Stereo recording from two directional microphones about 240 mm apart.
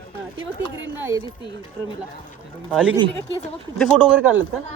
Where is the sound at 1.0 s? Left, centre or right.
Centre.